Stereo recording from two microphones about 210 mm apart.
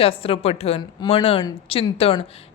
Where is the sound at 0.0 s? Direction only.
25° left (ahead or behind).